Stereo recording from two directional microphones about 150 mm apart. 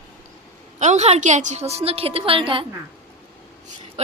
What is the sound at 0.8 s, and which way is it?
A woman's voice, 50° right (ahead or behind).